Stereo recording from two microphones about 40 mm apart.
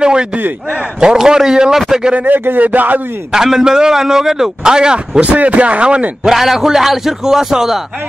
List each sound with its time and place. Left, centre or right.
0.0 s a sound: right
1.1 s a man's voice: centre
2.2 s speech: right
3.3 s a man's voice: centre
5.2 s speech: right
6.3 s a man's voice: centre